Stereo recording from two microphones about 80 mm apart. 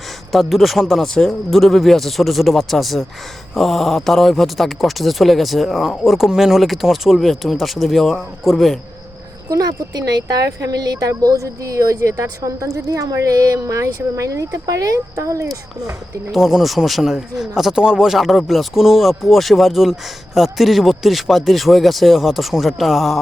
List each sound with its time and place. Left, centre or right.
0.3 s speech: centre
9.5 s a woman's voice: right
16.3 s speech: centre